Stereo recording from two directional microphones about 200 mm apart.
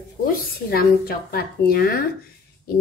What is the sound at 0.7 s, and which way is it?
Speech, 50° left (ahead or behind).